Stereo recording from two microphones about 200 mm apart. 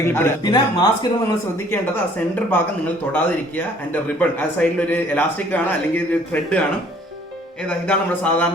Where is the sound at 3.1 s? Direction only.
10° left (ahead or behind).